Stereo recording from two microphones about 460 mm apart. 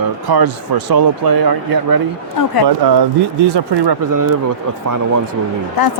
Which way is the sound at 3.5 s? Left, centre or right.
Right.